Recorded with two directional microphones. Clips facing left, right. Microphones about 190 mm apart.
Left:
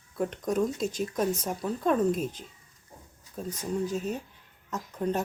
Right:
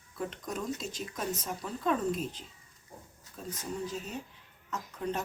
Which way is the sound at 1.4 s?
50° left (ahead or behind).